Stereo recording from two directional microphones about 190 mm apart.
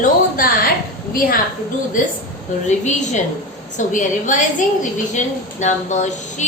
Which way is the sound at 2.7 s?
40° left (ahead or behind).